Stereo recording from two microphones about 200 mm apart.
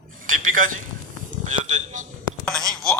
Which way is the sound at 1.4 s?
35° right (ahead or behind).